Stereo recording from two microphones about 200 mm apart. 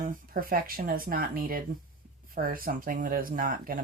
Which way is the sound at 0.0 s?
45° right (ahead or behind).